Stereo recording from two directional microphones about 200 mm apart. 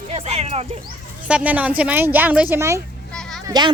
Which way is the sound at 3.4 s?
20° right (ahead or behind).